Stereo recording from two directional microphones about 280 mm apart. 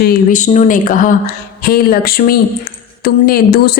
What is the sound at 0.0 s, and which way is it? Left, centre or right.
A woman's voice, left.